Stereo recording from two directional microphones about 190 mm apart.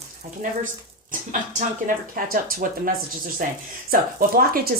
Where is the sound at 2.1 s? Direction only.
50° right (ahead or behind).